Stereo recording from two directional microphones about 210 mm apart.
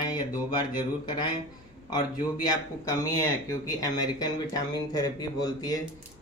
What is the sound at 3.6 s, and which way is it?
Speech, 15° left (ahead or behind).